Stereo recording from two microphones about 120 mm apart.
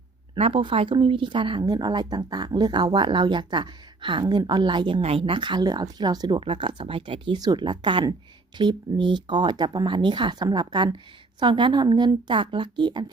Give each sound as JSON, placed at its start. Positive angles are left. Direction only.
{"t": 0.3, "sound": "speech", "side_deg": -50}
{"t": 6.4, "sound": "speech", "side_deg": -45}
{"t": 7.3, "sound": "speech", "side_deg": -35}